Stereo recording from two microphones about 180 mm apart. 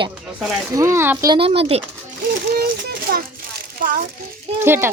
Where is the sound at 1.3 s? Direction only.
30° right (ahead or behind).